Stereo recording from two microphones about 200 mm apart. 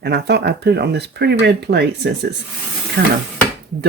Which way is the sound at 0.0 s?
55° right (ahead or behind).